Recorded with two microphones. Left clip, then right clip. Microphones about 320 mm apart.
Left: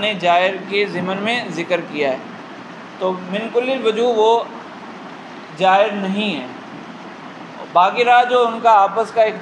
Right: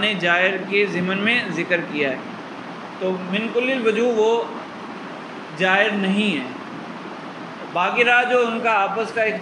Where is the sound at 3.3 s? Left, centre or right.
Centre.